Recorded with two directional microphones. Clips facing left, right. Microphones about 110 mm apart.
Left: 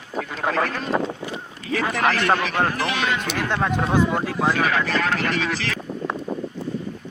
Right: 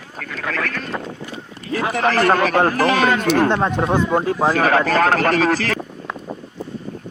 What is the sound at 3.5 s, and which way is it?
Speech, 20° right (ahead or behind).